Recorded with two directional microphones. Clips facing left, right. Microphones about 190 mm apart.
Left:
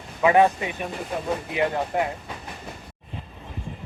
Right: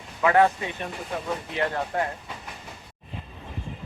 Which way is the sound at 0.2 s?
15° left (ahead or behind).